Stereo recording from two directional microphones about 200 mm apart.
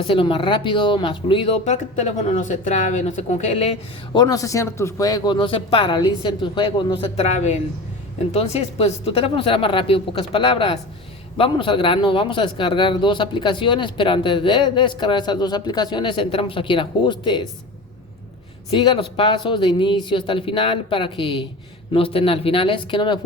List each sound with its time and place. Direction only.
0.0 s speech: 25° left (ahead or behind)
4.2 s speech: 15° left (ahead or behind)
18.7 s speech: 25° left (ahead or behind)